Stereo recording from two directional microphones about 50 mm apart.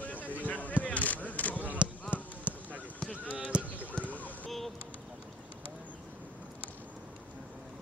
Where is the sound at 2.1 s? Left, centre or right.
Right.